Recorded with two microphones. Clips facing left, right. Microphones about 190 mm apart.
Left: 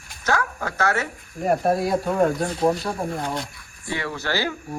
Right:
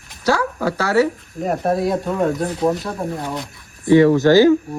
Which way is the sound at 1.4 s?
Centre (ahead or behind).